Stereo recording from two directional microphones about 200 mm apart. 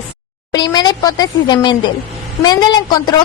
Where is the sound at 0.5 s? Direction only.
20° left (ahead or behind).